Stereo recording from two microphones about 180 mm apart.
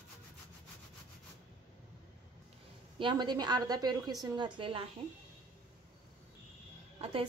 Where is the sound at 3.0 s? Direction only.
25° right (ahead or behind).